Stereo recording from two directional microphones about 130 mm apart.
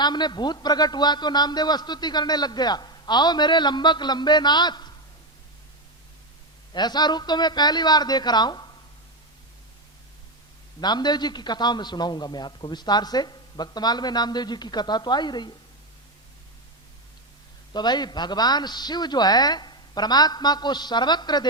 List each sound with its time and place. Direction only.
0.0 s a man's voice: 35° left (ahead or behind)
6.7 s a man's voice: 35° left (ahead or behind)
10.8 s a man's voice: 35° left (ahead or behind)
17.7 s a man's voice: 35° left (ahead or behind)